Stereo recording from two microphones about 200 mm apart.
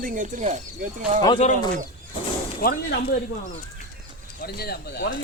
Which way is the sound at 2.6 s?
50° left (ahead or behind).